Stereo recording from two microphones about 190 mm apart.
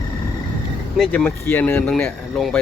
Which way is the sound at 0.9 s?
5° left (ahead or behind).